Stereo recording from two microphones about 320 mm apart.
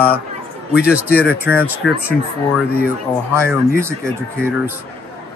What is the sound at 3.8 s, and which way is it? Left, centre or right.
Speech, centre.